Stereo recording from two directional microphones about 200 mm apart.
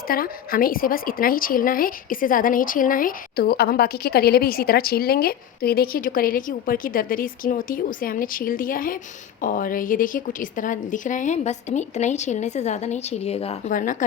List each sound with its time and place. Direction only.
0.1 s a woman's voice: 45° left (ahead or behind)